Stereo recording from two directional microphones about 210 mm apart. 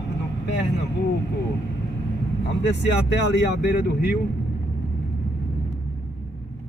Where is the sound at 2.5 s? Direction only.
55° left (ahead or behind).